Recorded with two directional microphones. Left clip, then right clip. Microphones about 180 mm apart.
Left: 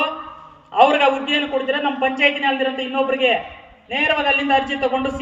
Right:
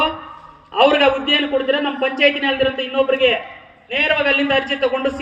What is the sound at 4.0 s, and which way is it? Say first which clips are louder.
A man's voice: right 2 dB; 60° left (ahead or behind).